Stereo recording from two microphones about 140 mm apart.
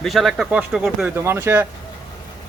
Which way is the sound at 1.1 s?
15° right (ahead or behind).